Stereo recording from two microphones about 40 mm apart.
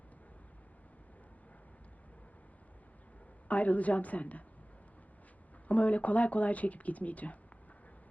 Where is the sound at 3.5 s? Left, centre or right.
Left.